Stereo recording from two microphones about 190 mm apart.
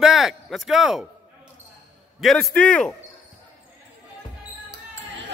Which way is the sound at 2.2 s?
Centre (ahead or behind).